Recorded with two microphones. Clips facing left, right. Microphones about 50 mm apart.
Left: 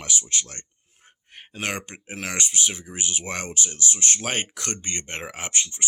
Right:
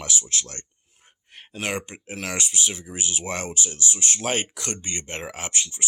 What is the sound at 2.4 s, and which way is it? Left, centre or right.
Speech, left.